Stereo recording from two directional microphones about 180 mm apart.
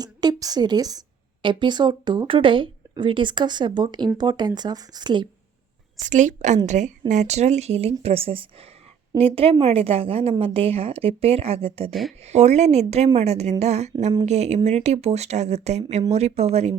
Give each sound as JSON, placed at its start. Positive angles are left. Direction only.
{"t": 0.0, "sound": "a woman's voice", "side_deg": -20}
{"t": 6.0, "sound": "a woman's voice", "side_deg": -45}
{"t": 11.9, "sound": "speech", "side_deg": 0}
{"t": 12.2, "sound": "a woman's voice", "side_deg": -40}